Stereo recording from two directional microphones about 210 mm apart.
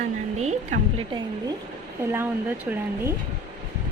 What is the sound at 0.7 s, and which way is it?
Speech, 35° right (ahead or behind).